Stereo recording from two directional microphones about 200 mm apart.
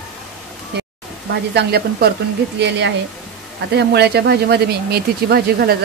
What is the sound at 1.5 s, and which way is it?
Speech, 50° right (ahead or behind).